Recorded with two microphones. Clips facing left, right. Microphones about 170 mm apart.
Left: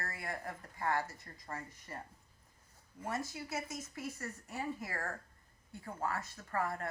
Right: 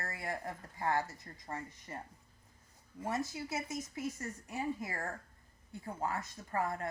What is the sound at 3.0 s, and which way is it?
Speech, 20° right (ahead or behind).